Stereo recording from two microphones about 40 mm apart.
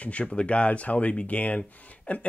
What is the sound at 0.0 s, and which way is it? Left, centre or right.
Speech, left.